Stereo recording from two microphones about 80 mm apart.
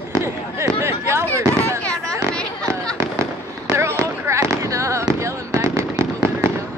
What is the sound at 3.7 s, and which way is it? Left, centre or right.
Fireworks, right.